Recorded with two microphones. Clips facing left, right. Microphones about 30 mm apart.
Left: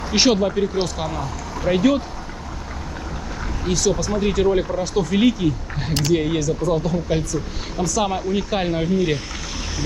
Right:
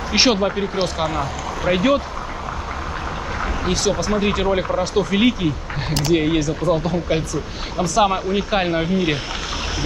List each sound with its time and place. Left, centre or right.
0.1 s speech: centre
3.6 s speech: right